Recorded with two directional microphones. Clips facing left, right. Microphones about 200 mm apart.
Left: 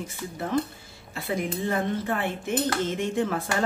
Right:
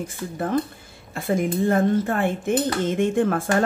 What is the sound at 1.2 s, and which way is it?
Speech, 50° right (ahead or behind).